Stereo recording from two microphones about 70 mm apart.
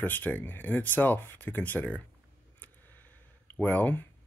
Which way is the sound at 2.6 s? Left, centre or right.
Left.